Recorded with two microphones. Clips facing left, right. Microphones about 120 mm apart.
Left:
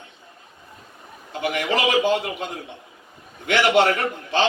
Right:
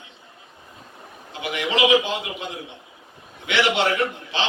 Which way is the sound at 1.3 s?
50° left (ahead or behind).